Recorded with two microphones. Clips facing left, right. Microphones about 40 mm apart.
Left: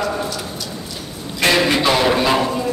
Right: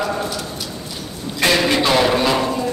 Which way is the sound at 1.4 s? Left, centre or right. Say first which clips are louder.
Left 1 dB; centre.